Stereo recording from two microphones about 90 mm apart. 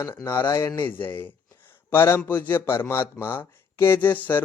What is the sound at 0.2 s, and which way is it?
Speech, 30° left (ahead or behind).